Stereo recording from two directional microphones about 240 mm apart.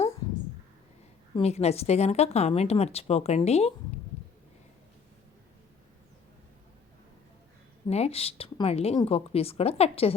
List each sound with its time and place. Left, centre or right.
1.4 s speech: left
7.9 s speech: left